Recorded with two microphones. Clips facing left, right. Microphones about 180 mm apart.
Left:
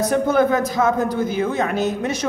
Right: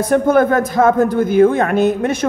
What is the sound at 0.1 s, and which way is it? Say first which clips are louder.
A man's voice: right 6 dB; 50° right (ahead or behind).